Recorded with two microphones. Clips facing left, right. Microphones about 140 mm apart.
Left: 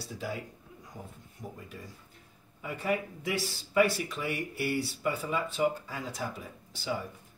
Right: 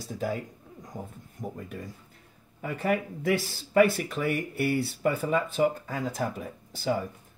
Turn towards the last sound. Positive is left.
turn(degrees=-50)  # may be behind; listen again after turning